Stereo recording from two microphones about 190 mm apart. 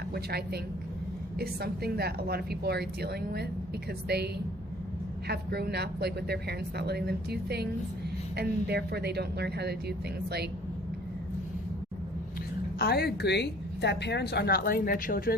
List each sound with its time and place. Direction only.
0.1 s a woman's voice: 55° right (ahead or behind)
5.3 s a woman's voice: 55° right (ahead or behind)
12.8 s a woman's voice: 55° left (ahead or behind)